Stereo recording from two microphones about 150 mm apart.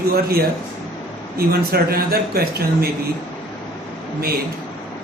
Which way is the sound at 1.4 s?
90° right.